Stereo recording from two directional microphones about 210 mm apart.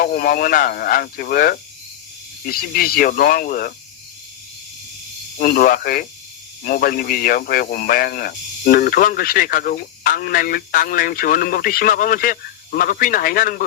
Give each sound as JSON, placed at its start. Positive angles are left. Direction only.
{"t": 0.0, "sound": "speech", "side_deg": 45}
{"t": 5.4, "sound": "speech", "side_deg": 45}